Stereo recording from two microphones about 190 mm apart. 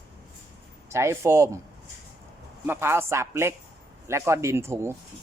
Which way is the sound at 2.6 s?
10° right (ahead or behind).